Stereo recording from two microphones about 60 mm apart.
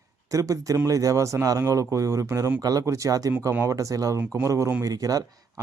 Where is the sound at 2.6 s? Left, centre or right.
Right.